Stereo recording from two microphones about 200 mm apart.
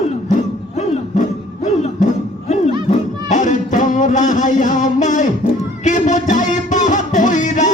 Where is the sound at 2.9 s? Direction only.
40° left (ahead or behind).